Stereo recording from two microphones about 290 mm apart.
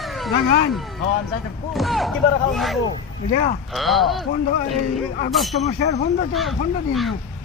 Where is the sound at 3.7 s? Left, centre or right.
Centre.